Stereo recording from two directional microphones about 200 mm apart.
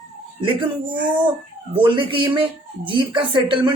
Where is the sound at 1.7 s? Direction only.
25° right (ahead or behind).